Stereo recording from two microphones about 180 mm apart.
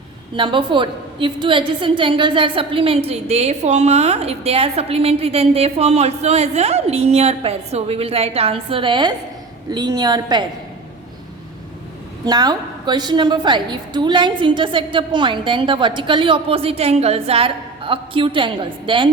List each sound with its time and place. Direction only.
0.3 s a woman's voice: 25° right (ahead or behind)
12.2 s a woman's voice: 20° right (ahead or behind)